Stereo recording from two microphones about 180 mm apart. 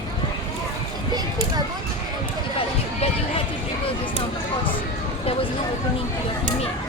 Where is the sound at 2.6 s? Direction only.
30° left (ahead or behind).